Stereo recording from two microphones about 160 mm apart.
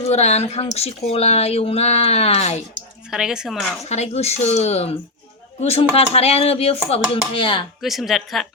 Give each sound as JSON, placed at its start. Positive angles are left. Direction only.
{"t": 0.1, "sound": "speech", "side_deg": 45}
{"t": 3.1, "sound": "speech", "side_deg": -5}
{"t": 3.8, "sound": "speech", "side_deg": 45}
{"t": 7.8, "sound": "speech", "side_deg": 0}